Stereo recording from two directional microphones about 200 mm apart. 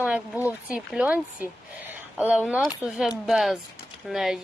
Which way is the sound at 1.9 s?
10° right (ahead or behind).